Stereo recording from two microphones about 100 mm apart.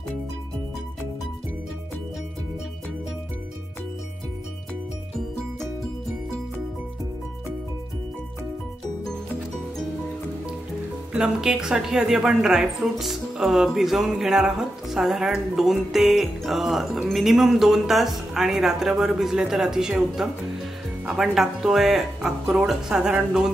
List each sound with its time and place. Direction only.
11.1 s speech: 5° right (ahead or behind)